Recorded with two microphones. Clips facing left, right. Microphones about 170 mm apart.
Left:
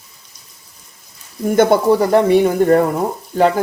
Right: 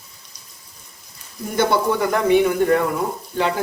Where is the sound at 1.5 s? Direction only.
50° left (ahead or behind).